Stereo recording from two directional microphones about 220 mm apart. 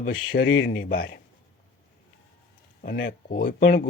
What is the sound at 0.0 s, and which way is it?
Speech, 50° left (ahead or behind).